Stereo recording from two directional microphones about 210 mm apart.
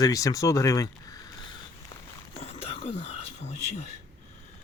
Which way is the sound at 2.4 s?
30° left (ahead or behind).